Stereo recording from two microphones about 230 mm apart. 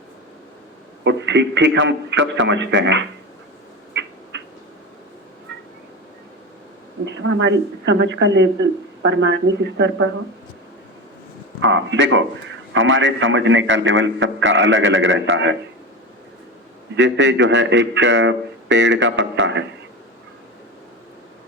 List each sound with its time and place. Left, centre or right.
1.0 s speech: right
3.9 s a sound: right
7.0 s speech: right
11.6 s a man's voice: right
16.9 s speech: right